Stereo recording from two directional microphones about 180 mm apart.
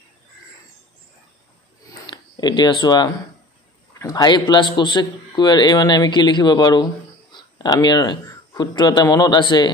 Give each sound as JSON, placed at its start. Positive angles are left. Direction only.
{"t": 2.0, "sound": "a man's voice", "side_deg": 25}